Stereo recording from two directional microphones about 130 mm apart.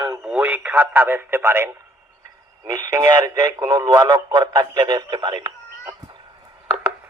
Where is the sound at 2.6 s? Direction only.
30° right (ahead or behind).